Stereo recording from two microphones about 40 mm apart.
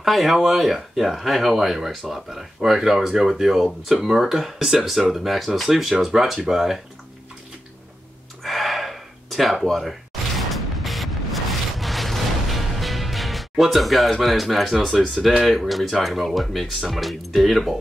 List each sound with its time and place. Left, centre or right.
0.0 s speech: centre
8.5 s gasp: centre
9.8 s music: centre
14.2 s speech: centre